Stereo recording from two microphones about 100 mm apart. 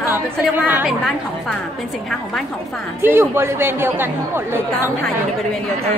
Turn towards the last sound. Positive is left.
turn(degrees=-20)  # may be behind; listen again after turning